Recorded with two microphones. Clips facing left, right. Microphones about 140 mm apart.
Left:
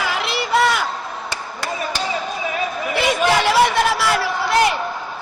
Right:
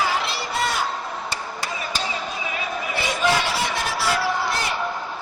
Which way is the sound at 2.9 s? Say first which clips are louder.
Left 5 dB; 70° left (ahead or behind).